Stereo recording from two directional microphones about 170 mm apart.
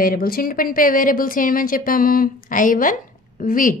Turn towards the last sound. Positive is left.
turn(degrees=50)  # may be behind; listen again after turning